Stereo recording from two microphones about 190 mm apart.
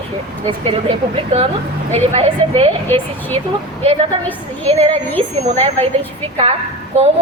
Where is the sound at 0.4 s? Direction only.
30° right (ahead or behind).